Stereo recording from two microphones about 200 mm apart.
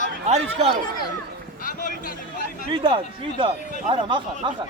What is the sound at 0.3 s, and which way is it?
Speech, 30° right (ahead or behind).